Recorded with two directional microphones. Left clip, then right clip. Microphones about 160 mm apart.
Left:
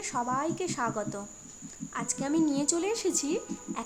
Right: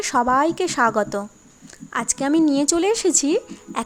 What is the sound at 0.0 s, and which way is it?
Speech, 60° right (ahead or behind).